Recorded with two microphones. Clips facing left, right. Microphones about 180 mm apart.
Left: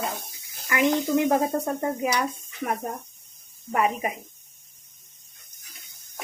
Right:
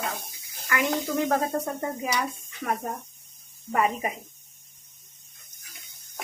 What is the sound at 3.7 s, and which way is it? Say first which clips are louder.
Speech: left 1 dB; 15° left (ahead or behind).